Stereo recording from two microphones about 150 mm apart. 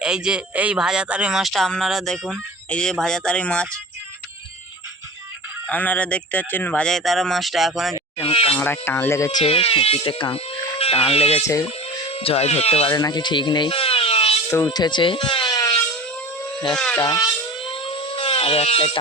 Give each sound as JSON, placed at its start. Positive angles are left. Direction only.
{"t": 0.0, "sound": "speech", "side_deg": -5}
{"t": 5.6, "sound": "speech", "side_deg": 10}
{"t": 8.2, "sound": "speech", "side_deg": 40}
{"t": 8.5, "sound": "speech", "side_deg": 15}
{"t": 9.4, "sound": "speech", "side_deg": 40}
{"t": 13.0, "sound": "speech", "side_deg": 25}
{"t": 14.5, "sound": "speech", "side_deg": 25}
{"t": 16.7, "sound": "speech", "side_deg": 5}
{"t": 17.0, "sound": "a sound", "side_deg": 25}